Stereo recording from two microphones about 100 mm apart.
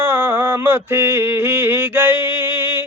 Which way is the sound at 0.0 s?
25° right (ahead or behind).